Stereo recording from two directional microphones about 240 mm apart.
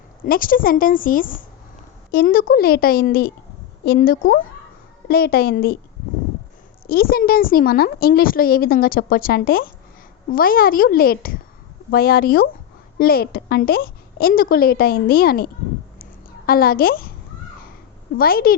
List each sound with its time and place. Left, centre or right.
0.3 s a woman's voice: left
6.8 s a woman's voice: left
16.5 s a woman's voice: left
18.2 s a woman's voice: left